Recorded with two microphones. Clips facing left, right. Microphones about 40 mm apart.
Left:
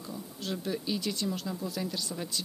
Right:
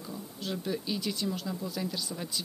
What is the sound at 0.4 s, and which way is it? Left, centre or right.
Speech, centre.